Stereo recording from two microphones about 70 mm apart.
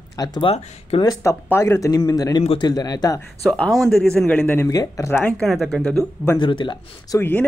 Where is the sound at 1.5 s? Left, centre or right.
Left.